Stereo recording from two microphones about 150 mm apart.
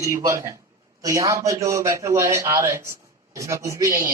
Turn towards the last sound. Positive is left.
turn(degrees=-20)  # may be behind; listen again after turning